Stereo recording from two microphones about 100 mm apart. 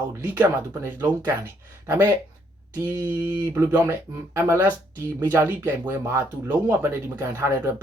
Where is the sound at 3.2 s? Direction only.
20° right (ahead or behind).